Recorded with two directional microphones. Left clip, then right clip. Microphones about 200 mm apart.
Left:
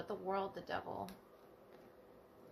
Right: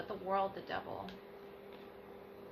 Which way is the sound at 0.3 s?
60° left (ahead or behind).